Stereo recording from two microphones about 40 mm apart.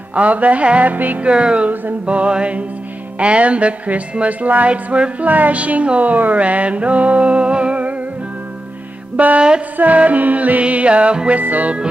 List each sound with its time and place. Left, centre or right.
0.1 s music: right
0.9 s music: right
1.2 s music: right
4.6 s music: right
9.1 s music: right
10.6 s music: right
11.3 s music: right